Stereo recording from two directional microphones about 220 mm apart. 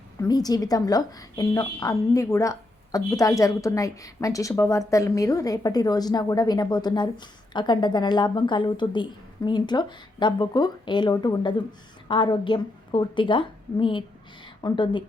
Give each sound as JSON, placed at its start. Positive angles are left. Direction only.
{"t": 0.2, "sound": "a woman's voice", "side_deg": 15}